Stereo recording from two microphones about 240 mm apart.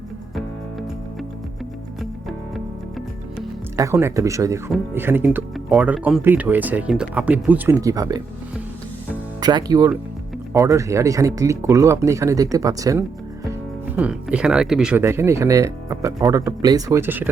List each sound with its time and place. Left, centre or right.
3.8 s speech: centre
9.4 s speech: centre